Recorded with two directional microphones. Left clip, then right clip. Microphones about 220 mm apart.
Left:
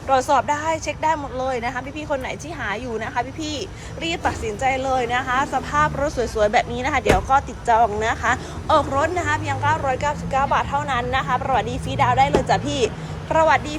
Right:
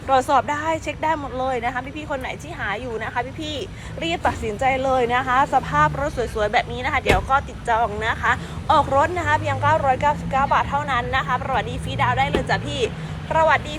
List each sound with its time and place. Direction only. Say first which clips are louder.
0.1 s speech: even; 10° left (ahead or behind)